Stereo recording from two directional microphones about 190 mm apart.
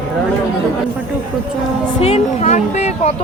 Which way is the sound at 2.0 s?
35° left (ahead or behind).